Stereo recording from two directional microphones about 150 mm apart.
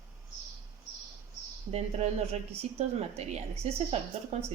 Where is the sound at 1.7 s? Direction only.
45° right (ahead or behind).